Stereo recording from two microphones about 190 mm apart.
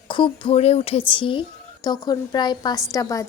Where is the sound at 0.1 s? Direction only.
25° left (ahead or behind).